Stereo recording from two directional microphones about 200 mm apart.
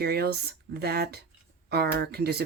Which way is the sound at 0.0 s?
50° right (ahead or behind).